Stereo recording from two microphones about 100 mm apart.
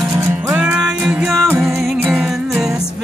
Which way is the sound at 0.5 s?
10° right (ahead or behind).